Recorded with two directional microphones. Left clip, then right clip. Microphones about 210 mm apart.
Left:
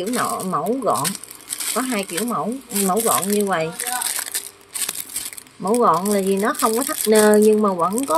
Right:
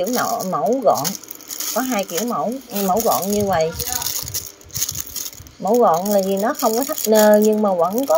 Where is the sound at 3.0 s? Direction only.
10° left (ahead or behind).